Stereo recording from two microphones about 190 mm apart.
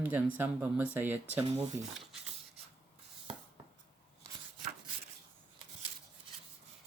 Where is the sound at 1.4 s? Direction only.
30° right (ahead or behind).